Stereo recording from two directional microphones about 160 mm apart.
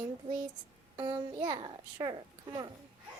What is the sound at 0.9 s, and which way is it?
A child's voice, 30° right (ahead or behind).